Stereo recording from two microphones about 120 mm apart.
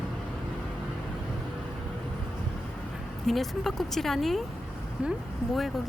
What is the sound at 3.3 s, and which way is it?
Speech, centre (ahead or behind).